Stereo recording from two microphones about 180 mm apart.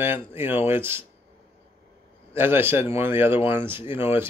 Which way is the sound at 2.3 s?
10° right (ahead or behind).